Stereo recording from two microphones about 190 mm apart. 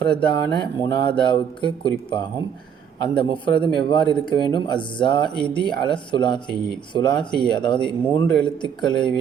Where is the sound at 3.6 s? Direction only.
25° left (ahead or behind).